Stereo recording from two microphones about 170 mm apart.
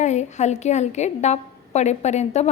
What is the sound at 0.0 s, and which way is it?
A woman's voice, 45° left (ahead or behind).